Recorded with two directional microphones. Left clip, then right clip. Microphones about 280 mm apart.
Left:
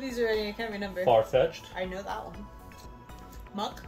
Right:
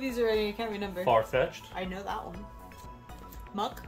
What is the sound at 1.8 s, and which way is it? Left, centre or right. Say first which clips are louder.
Speech: left 1 dB; right.